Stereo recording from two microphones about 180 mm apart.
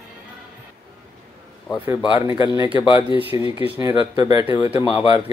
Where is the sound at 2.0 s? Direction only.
30° left (ahead or behind).